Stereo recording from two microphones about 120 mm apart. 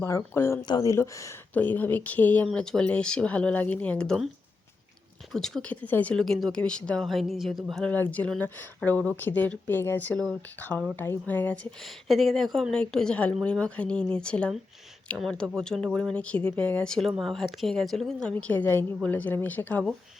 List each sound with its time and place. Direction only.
0.0 s speech: 20° left (ahead or behind)
0.6 s speech: 30° left (ahead or behind)
1.5 s a woman's voice: 15° left (ahead or behind)
5.3 s speech: 5° left (ahead or behind)
7.9 s a woman's voice: 15° left (ahead or behind)